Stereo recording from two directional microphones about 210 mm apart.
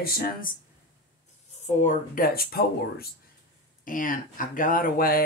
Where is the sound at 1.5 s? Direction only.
35° left (ahead or behind).